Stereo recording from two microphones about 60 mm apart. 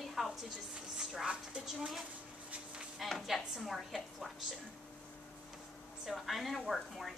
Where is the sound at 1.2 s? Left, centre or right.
Centre.